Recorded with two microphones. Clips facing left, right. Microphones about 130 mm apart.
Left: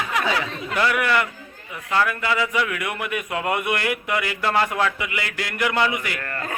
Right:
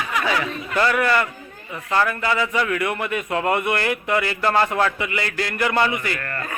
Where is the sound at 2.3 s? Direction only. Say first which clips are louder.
Right 1 dB; 10° left (ahead or behind).